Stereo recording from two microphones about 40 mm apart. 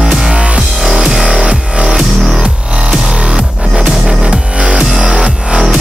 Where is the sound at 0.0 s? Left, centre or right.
Centre.